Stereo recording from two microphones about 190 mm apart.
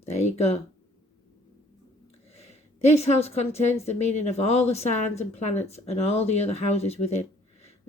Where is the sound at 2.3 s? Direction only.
35° left (ahead or behind).